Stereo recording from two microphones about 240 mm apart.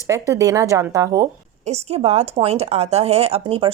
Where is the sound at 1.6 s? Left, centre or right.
Right.